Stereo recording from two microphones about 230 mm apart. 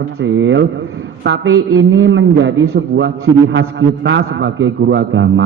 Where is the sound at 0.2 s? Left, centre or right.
Right.